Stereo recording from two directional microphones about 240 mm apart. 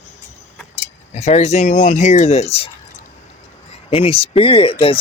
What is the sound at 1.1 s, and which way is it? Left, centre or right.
Speech, left.